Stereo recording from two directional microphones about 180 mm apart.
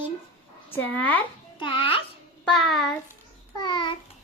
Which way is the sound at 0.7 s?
10° left (ahead or behind).